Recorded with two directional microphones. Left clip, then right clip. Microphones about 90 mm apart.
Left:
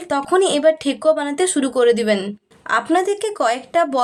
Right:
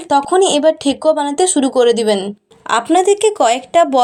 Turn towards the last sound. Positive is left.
turn(degrees=-40)  # may be behind; listen again after turning